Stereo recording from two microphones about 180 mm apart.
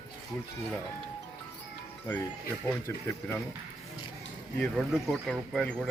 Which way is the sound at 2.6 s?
15° left (ahead or behind).